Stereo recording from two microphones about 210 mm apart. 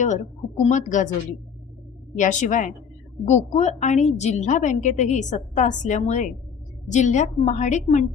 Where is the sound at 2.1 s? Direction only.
35° left (ahead or behind).